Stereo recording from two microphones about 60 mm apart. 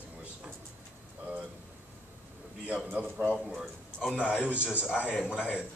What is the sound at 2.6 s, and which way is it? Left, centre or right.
Speech, centre.